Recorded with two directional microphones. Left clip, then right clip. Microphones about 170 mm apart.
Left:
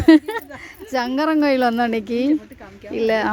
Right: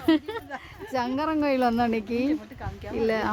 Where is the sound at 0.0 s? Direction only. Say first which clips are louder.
Left 11 dB; 40° left (ahead or behind).